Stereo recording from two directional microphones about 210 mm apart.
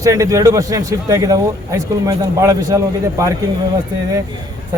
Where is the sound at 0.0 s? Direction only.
15° right (ahead or behind).